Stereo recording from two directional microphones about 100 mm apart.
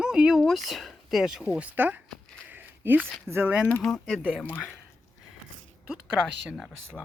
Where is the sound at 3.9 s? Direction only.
5° left (ahead or behind).